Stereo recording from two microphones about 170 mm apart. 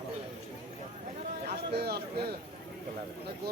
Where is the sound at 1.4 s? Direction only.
70° right (ahead or behind).